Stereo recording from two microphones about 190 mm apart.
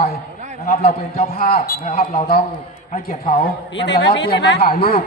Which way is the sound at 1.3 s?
50° left (ahead or behind).